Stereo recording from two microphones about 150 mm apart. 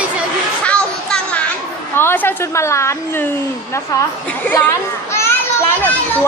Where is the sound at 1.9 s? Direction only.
15° left (ahead or behind).